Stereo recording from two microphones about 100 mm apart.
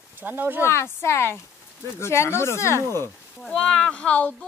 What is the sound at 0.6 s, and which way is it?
Speech, 25° left (ahead or behind).